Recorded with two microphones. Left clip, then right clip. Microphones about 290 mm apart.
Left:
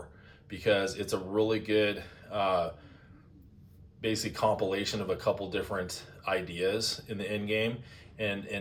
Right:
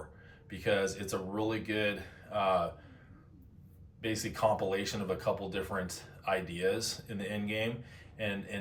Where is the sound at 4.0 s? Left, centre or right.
Centre.